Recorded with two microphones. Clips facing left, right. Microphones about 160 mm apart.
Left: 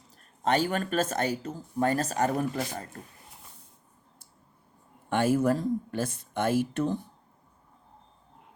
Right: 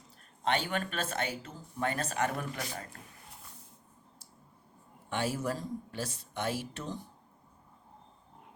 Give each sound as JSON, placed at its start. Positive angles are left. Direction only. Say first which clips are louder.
{"t": 0.4, "sound": "speech", "louder": "left 5 dB", "side_deg": 40}
{"t": 5.0, "sound": "speech", "louder": "left 9 dB", "side_deg": 50}